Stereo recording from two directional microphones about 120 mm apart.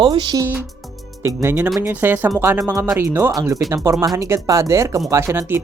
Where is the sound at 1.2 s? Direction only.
20° right (ahead or behind).